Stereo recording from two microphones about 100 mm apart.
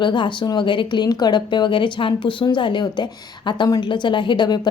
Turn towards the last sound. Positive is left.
turn(degrees=50)  # may be behind; listen again after turning